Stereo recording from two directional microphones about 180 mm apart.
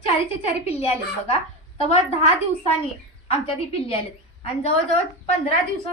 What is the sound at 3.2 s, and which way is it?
Speech, 35° left (ahead or behind).